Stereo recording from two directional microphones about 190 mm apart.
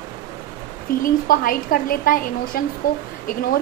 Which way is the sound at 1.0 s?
50° left (ahead or behind).